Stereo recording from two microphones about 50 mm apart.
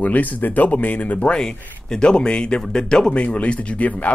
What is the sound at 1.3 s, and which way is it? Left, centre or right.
Speech, centre.